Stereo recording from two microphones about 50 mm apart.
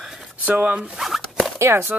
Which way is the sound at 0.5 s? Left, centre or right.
Right.